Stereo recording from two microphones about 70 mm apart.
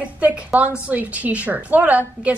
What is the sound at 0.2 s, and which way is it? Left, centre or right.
A woman's voice, centre.